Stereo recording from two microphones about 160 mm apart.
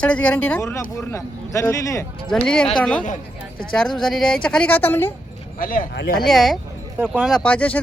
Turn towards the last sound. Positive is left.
turn(degrees=10)  # may be behind; listen again after turning